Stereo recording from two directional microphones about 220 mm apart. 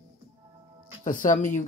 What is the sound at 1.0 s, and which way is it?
Speech, 35° left (ahead or behind).